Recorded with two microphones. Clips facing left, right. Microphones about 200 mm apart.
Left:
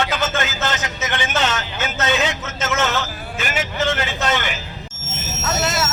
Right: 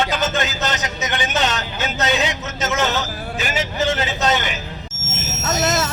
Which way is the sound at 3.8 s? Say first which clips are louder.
Right 2 dB; 20° right (ahead or behind).